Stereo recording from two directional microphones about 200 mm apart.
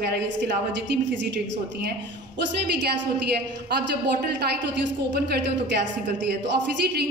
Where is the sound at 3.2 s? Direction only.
55° right (ahead or behind).